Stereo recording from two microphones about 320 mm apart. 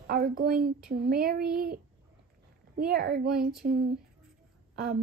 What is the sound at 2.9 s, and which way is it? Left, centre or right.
A woman's voice, right.